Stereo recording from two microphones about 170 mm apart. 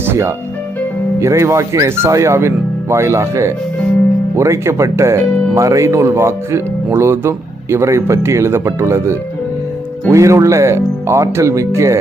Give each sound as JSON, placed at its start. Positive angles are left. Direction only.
{"t": 0.0, "sound": "music", "side_deg": -15}
{"t": 1.2, "sound": "speech", "side_deg": -15}